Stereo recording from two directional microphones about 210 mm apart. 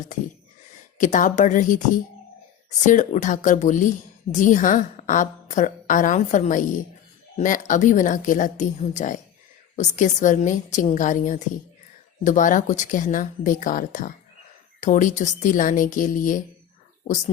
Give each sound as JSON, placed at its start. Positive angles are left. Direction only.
{"t": 0.9, "sound": "a woman's voice", "side_deg": 35}